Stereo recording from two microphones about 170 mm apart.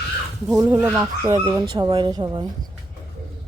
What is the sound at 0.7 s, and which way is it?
Speech, 15° right (ahead or behind).